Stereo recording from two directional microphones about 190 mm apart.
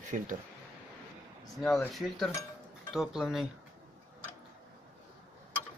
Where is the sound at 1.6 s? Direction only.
Centre (ahead or behind).